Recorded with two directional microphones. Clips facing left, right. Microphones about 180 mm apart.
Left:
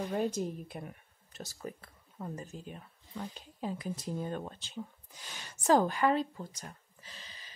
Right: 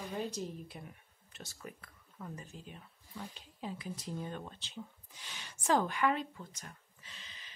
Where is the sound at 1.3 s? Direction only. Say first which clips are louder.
Left 6 dB; 35° left (ahead or behind).